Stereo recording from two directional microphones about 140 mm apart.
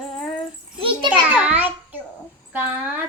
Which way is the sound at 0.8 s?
40° right (ahead or behind).